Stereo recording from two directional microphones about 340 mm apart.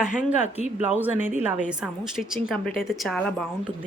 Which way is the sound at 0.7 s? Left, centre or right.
Centre.